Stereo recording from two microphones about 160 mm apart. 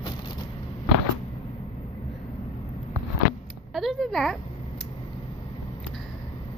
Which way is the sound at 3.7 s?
Centre (ahead or behind).